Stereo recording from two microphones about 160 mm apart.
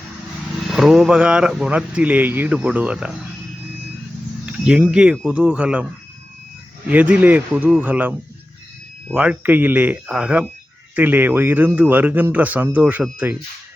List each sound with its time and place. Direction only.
0.7 s a man's voice: centre (ahead or behind)
4.4 s a man's voice: 5° right (ahead or behind)
9.1 s a man's voice: 10° right (ahead or behind)